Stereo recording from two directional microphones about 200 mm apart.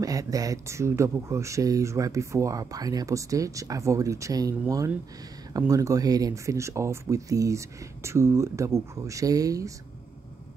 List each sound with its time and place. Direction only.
0.0 s speech: 15° right (ahead or behind)